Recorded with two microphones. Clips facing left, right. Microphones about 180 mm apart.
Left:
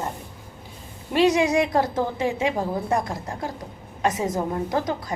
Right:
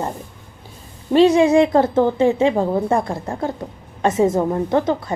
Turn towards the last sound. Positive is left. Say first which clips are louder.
# right 7 dB
turn(degrees=-25)  # may be behind; listen again after turning